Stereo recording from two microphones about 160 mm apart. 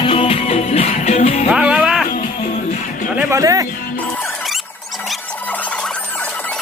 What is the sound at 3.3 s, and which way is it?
Speech, 20° right (ahead or behind).